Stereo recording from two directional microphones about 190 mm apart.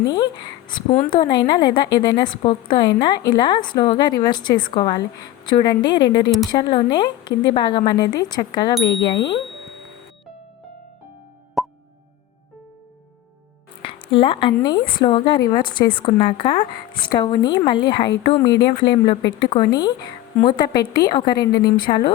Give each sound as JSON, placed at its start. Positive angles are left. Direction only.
{"t": 0.0, "sound": "a woman's voice", "side_deg": 20}
{"t": 8.8, "sound": "speech", "side_deg": 65}
{"t": 9.0, "sound": "a woman's voice", "side_deg": 20}
{"t": 11.6, "sound": "plop", "side_deg": 0}
{"t": 13.8, "sound": "a woman's voice", "side_deg": 25}
{"t": 21.6, "sound": "speech", "side_deg": 55}